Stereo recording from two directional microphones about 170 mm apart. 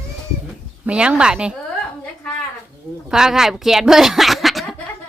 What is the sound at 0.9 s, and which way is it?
Speech, 5° right (ahead or behind).